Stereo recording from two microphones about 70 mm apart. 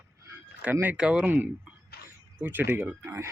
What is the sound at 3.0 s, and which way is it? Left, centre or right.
Speech, right.